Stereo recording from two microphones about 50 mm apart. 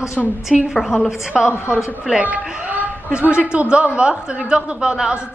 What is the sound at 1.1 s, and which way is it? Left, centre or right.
A woman's voice, centre.